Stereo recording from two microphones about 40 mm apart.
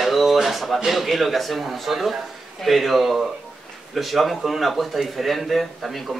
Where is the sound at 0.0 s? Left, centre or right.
Centre.